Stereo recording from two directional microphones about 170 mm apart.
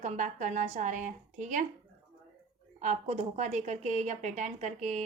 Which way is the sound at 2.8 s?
40° right (ahead or behind).